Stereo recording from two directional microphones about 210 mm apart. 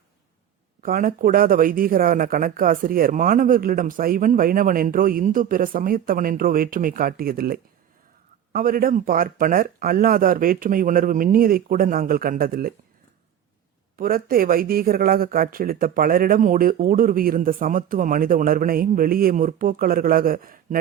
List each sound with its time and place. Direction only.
0.8 s speech: 45° right (ahead or behind)
14.0 s speech: 45° right (ahead or behind)